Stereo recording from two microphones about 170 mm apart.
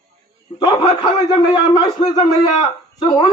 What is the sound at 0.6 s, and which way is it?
A man's voice, 20° left (ahead or behind).